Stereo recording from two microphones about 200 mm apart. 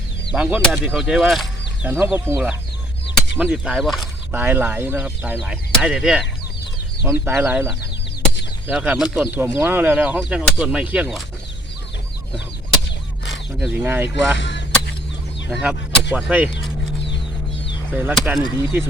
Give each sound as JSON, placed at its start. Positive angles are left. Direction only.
{"t": 0.3, "sound": "speech", "side_deg": -5}
{"t": 1.9, "sound": "speech", "side_deg": -10}
{"t": 4.3, "sound": "speech", "side_deg": -10}
{"t": 7.3, "sound": "speech", "side_deg": -5}
{"t": 13.6, "sound": "speech", "side_deg": -5}
{"t": 14.3, "sound": "a sound", "side_deg": 65}
{"t": 15.4, "sound": "speech", "side_deg": -5}
{"t": 17.9, "sound": "speech", "side_deg": -5}